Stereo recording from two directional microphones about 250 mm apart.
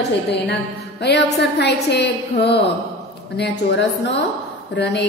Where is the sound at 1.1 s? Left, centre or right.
Left.